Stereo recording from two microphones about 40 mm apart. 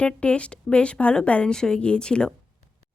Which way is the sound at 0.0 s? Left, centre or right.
Left.